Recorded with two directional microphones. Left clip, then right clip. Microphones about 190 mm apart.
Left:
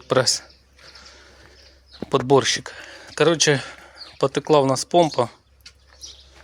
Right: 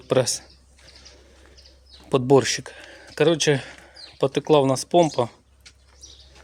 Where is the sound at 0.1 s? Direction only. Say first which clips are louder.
Left 2 dB; 15° right (ahead or behind).